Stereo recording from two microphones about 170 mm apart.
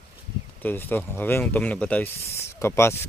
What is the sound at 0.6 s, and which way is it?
Speech, 10° left (ahead or behind).